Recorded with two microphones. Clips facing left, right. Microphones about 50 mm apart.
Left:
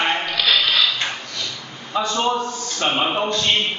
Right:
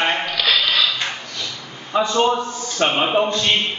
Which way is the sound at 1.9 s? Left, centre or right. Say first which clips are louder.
Right 4 dB; right.